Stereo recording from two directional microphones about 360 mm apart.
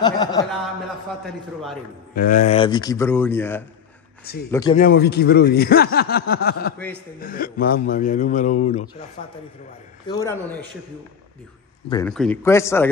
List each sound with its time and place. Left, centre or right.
0.0 s speech: centre
1.2 s speech: centre
2.1 s speech: left; by 3.6 s centre
4.2 s speech: left
4.5 s speech: centre
4.7 s a man's voice: left
10.0 s speech: centre
11.9 s speech: centre